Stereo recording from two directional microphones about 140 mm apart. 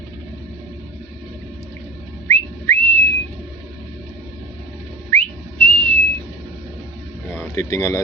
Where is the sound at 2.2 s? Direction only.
20° left (ahead or behind).